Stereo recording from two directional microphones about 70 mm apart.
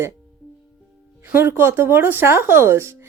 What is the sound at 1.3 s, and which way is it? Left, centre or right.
Speech, right.